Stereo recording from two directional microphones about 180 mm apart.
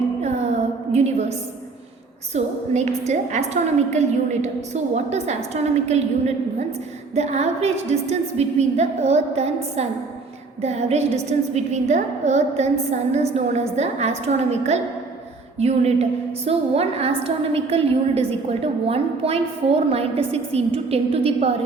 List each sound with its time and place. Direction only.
0.2 s music: 40° right (ahead or behind)
0.9 s a woman's voice: 40° right (ahead or behind)
2.3 s a woman's voice: 40° right (ahead or behind)
10.6 s a woman's voice: 35° right (ahead or behind)
15.5 s a woman's voice: 35° right (ahead or behind)